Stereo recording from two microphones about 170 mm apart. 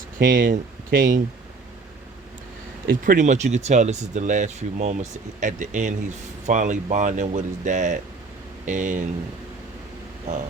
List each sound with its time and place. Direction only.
0.2 s speech: 55° right (ahead or behind)
2.8 s speech: 60° right (ahead or behind)